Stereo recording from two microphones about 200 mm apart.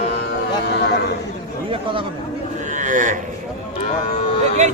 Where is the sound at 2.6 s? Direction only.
40° right (ahead or behind).